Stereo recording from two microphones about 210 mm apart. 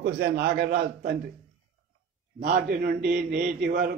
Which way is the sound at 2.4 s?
45° right (ahead or behind).